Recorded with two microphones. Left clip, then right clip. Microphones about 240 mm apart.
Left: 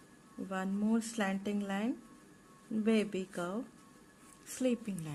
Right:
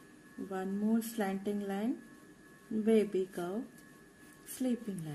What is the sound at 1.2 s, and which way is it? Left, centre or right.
Speech, left.